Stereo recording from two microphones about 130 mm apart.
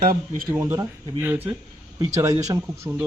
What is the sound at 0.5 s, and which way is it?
Speech, 20° right (ahead or behind).